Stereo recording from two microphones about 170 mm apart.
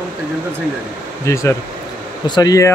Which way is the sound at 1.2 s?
15° left (ahead or behind).